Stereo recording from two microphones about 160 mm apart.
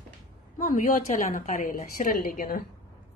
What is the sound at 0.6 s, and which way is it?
A woman's voice, 55° left (ahead or behind).